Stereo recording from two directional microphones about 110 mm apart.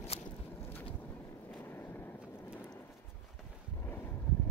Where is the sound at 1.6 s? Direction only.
20° left (ahead or behind).